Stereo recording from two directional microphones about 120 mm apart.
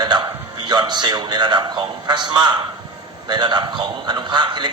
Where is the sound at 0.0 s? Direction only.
40° right (ahead or behind).